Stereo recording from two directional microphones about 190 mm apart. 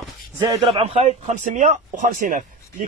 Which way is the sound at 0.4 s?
20° right (ahead or behind).